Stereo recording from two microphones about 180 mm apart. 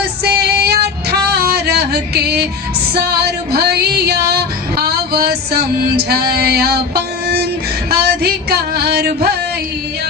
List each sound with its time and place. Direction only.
0.3 s female singing: 65° right (ahead or behind)
2.9 s music: 60° right (ahead or behind)
7.9 s a sound: 60° right (ahead or behind)